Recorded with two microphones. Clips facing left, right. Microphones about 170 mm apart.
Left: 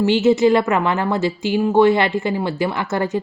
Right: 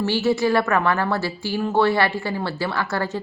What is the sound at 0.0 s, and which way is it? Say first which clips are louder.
A woman's voice: left 6 dB; 20° left (ahead or behind).